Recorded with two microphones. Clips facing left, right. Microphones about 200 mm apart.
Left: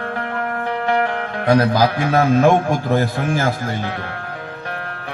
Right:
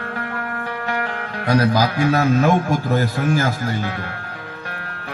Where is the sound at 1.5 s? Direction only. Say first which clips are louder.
Left 2 dB; 45° left (ahead or behind).